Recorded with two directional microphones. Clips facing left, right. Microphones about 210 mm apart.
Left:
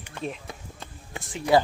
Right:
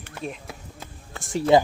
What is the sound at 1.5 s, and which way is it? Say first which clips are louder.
Speech: right 3 dB; 20° right (ahead or behind).